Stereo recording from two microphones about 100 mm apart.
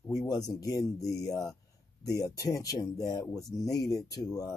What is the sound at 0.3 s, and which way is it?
Speech, 40° left (ahead or behind).